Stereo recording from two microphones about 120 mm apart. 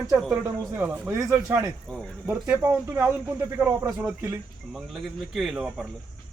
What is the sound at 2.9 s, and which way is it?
Speech, 25° right (ahead or behind).